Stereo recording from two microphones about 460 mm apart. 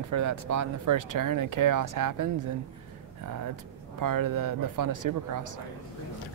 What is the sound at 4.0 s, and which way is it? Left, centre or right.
Speech, right.